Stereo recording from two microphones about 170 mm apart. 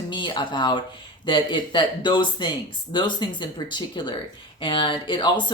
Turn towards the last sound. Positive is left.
turn(degrees=30)  # may be behind; listen again after turning